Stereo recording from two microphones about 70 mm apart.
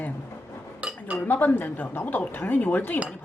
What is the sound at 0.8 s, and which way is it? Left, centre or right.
Dishes, centre.